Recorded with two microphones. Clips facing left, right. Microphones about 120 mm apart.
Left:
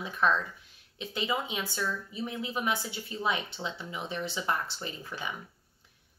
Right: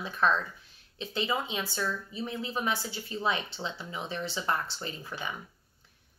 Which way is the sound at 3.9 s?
10° left (ahead or behind).